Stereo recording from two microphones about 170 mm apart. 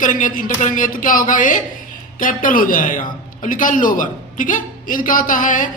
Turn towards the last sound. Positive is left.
turn(degrees=50)  # may be behind; listen again after turning